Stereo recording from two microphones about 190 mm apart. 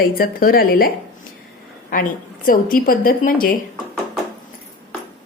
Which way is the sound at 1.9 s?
45° left (ahead or behind).